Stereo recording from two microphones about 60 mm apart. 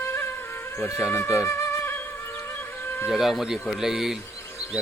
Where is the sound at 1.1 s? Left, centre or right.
Left.